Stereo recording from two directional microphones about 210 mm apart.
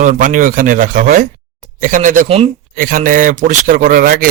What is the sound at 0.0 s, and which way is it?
Speech, 40° right (ahead or behind).